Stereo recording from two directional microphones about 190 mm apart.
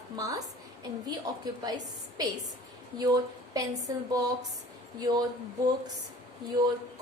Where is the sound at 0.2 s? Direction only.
20° right (ahead or behind).